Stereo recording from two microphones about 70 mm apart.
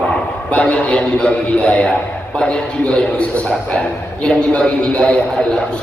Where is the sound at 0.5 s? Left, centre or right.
Centre.